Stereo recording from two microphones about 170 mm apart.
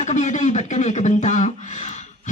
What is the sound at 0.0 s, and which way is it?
Speech, 45° left (ahead or behind).